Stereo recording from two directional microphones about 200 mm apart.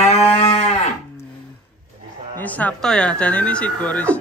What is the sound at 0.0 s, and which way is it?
Moo, 30° left (ahead or behind).